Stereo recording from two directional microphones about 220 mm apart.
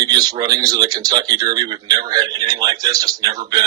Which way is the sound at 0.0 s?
15° right (ahead or behind).